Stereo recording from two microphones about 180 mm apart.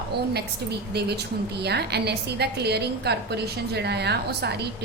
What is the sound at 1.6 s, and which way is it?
A woman's voice, 65° right (ahead or behind).